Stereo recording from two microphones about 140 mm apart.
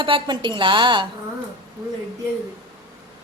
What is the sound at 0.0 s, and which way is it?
A woman's voice, 35° right (ahead or behind).